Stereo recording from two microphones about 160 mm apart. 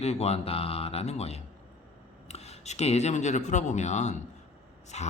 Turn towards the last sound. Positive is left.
turn(degrees=45)  # may be behind; listen again after turning